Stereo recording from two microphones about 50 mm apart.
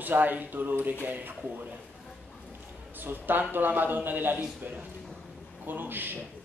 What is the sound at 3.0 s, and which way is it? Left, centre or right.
Speech, right.